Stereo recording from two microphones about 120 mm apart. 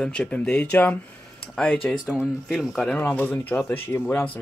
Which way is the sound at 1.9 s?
Centre (ahead or behind).